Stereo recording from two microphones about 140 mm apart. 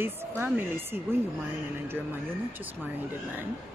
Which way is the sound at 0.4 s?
15° right (ahead or behind).